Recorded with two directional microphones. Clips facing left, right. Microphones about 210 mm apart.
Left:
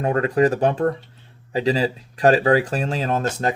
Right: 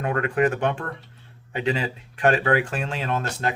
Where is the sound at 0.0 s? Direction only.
35° left (ahead or behind).